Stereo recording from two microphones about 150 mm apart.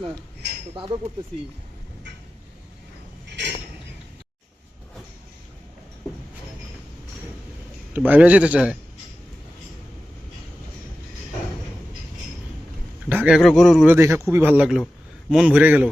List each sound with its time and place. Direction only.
7.9 s a man's voice: 10° right (ahead or behind)
13.1 s a sound: 10° right (ahead or behind)
13.4 s speech: centre (ahead or behind)
13.8 s a man's voice: 15° right (ahead or behind)